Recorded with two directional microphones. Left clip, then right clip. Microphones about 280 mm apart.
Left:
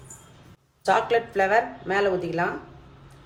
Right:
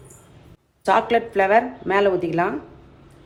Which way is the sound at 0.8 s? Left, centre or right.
Centre.